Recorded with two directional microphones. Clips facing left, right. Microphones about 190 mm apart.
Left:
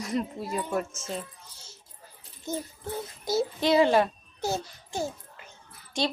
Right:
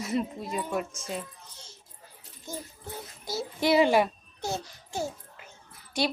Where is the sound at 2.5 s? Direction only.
20° left (ahead or behind).